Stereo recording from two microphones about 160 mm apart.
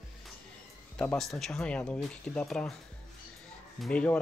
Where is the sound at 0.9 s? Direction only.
5° left (ahead or behind).